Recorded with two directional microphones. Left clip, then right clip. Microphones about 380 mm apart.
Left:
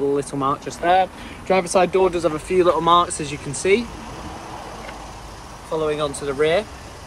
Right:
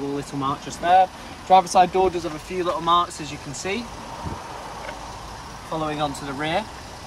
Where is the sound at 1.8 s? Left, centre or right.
Right.